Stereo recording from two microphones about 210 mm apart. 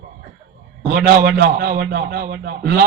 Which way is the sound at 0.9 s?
50° right (ahead or behind).